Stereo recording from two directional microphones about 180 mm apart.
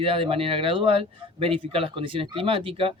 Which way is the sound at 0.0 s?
30° right (ahead or behind).